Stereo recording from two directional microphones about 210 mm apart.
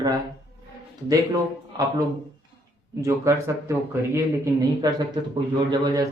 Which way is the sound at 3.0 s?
15° right (ahead or behind).